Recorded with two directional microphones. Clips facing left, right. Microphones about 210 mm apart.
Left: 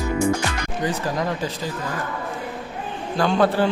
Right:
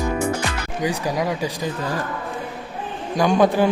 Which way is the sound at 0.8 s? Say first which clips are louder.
Right 2 dB; 10° right (ahead or behind).